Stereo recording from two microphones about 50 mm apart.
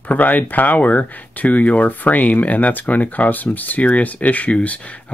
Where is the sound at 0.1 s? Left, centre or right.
Left.